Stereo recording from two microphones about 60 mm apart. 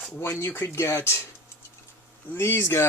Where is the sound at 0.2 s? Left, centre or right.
Left.